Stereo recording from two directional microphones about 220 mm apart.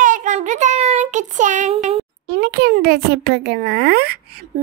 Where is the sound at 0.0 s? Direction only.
35° right (ahead or behind).